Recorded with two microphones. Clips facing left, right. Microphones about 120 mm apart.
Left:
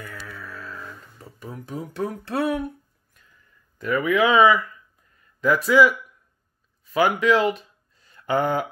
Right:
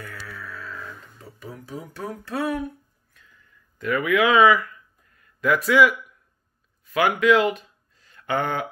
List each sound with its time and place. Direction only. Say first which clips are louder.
0.3 s music: even; centre (ahead or behind)
1.7 s speech: left 5 dB; 25° left (ahead or behind)
3.7 s speech: even; centre (ahead or behind)
7.0 s speech: even; centre (ahead or behind)
7.4 s a sound: left 1 dB; centre (ahead or behind)
8.4 s speech: left 3 dB; 40° left (ahead or behind)